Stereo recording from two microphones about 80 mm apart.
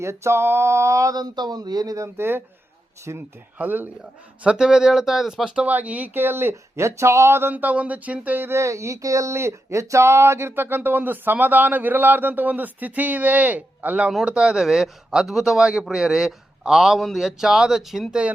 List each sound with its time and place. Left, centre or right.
0.0 s mantra: right
1.1 s speech: right
2.1 s speech: right
3.1 s mantra: right
3.6 s speech: right
4.4 s speech: centre
5.6 s speech: centre